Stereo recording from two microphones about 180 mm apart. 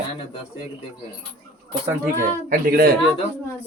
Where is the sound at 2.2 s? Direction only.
55° right (ahead or behind).